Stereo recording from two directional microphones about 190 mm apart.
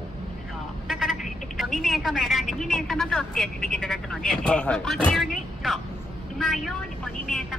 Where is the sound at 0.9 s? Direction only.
Centre (ahead or behind).